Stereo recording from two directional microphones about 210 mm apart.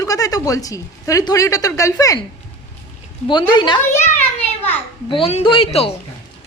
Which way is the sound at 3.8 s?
10° left (ahead or behind).